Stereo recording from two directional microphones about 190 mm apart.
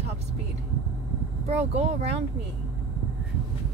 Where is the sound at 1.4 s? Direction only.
35° right (ahead or behind).